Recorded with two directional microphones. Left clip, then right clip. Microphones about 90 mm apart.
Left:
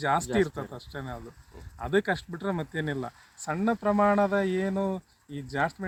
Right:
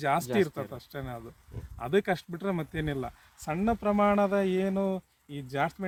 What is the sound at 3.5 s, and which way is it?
Speech, 35° right (ahead or behind).